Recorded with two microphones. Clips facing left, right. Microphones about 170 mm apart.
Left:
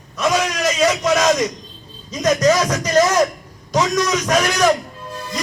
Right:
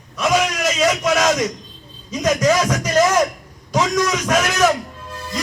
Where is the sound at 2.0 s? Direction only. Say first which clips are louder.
Left 1 dB; 10° right (ahead or behind).